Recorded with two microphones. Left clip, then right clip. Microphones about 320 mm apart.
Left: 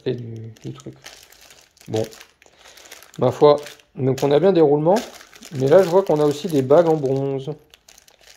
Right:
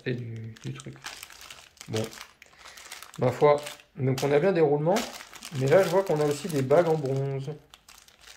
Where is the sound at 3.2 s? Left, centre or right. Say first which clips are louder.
Left 7 dB; left.